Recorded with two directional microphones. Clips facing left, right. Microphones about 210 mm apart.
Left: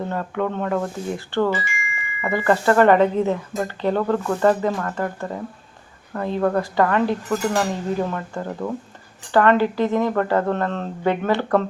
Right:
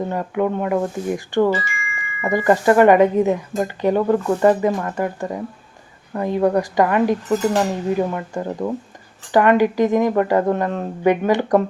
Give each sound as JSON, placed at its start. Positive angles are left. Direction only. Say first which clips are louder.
{"t": 0.0, "sound": "speech", "louder": "right 3 dB", "side_deg": -15}